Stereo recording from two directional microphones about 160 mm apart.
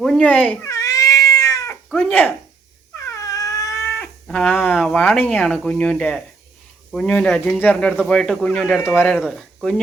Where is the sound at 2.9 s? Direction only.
20° left (ahead or behind).